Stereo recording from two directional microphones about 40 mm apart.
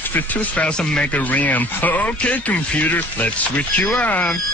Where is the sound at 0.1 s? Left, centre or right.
Left.